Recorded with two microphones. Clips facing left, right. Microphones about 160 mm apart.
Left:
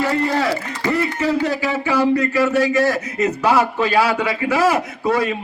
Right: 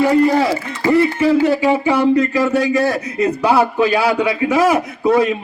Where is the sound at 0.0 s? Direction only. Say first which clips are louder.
Right 6 dB; 15° right (ahead or behind).